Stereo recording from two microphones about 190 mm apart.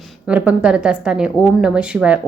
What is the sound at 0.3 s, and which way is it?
A woman's voice, 5° right (ahead or behind).